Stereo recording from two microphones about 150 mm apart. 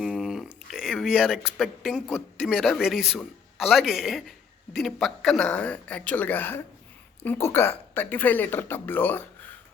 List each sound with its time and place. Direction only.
0.0 s speech: 5° right (ahead or behind); by 9.2 s 10° left (ahead or behind)